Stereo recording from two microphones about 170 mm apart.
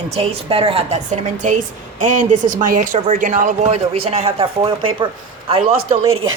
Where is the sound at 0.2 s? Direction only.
35° right (ahead or behind).